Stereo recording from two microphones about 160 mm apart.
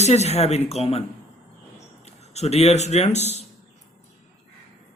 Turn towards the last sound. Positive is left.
turn(degrees=45)  # may be behind; listen again after turning